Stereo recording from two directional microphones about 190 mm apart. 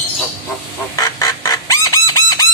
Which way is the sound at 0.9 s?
15° left (ahead or behind).